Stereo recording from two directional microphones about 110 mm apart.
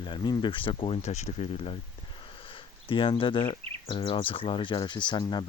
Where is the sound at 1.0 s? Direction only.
90° left; by 1.8 s 60° left (ahead or behind).